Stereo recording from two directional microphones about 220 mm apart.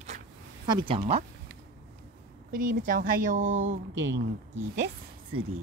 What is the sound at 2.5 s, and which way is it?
Speech, 40° right (ahead or behind).